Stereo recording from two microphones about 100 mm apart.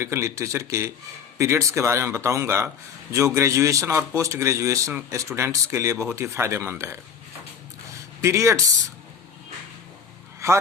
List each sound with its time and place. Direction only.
0.0 s a man's voice: 30° right (ahead or behind)
8.2 s a man's voice: 30° right (ahead or behind)